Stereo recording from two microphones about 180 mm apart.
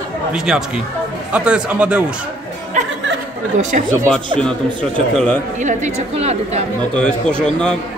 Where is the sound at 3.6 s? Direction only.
45° right (ahead or behind).